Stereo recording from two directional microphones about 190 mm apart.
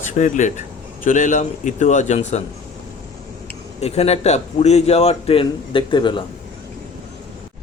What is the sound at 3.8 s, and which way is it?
Speech, 35° left (ahead or behind).